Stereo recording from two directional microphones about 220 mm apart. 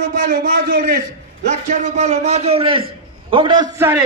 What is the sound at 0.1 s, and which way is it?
A man's voice, 40° right (ahead or behind).